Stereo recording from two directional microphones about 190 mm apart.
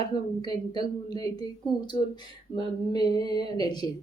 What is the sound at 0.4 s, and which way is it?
A woman's voice, 20° left (ahead or behind).